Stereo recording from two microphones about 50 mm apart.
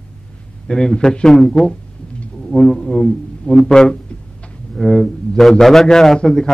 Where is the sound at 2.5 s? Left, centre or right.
Centre.